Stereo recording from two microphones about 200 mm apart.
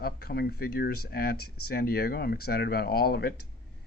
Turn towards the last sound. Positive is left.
turn(degrees=50)  # may be behind; listen again after turning